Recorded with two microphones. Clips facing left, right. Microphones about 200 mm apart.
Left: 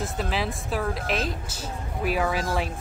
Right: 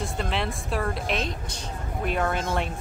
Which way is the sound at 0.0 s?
Centre (ahead or behind).